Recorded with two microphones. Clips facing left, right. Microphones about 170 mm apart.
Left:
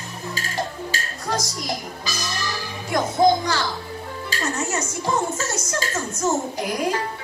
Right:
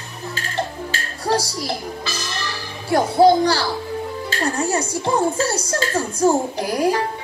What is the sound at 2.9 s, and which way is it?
Music, 35° right (ahead or behind).